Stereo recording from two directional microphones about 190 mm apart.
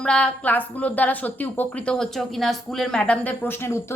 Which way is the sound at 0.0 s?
5° left (ahead or behind).